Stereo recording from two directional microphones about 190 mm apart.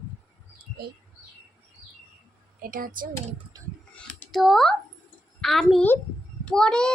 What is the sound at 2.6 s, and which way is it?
Speech, 45° right (ahead or behind).